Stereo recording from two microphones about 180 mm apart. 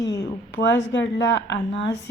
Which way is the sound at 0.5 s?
80° left.